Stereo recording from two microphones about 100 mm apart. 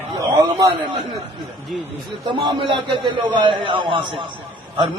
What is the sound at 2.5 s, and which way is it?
A man's voice, 55° right (ahead or behind).